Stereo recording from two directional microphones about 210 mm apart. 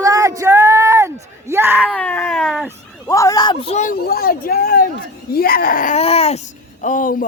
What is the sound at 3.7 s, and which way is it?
Speech, 40° left (ahead or behind).